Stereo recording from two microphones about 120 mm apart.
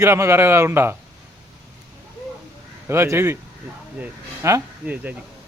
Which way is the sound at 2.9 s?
20° right (ahead or behind).